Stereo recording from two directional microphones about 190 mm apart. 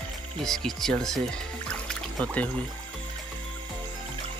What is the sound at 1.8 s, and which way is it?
Music, 5° left (ahead or behind).